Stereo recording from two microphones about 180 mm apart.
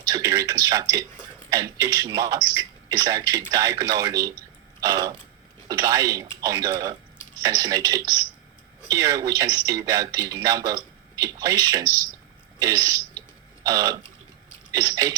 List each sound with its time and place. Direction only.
0.0 s speech: 20° right (ahead or behind)